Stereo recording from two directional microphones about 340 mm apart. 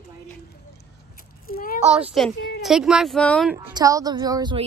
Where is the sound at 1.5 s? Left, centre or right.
Left.